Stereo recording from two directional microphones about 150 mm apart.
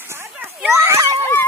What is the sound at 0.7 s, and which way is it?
Children playing, 15° right (ahead or behind).